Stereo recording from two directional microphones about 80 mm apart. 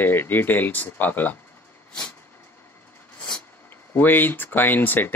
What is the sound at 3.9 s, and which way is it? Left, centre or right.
Speech, left.